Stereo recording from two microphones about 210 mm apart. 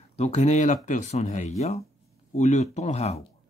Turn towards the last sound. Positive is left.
turn(degrees=30)  # may be behind; listen again after turning